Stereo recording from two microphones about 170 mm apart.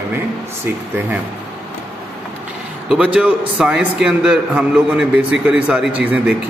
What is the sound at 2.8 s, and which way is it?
A man's voice, 5° right (ahead or behind).